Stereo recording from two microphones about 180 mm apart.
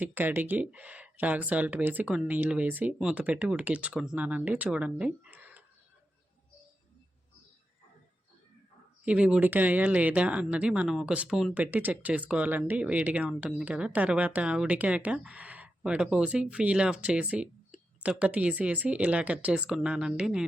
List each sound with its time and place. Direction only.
0.0 s speech: 10° right (ahead or behind)
9.0 s speech: 5° right (ahead or behind)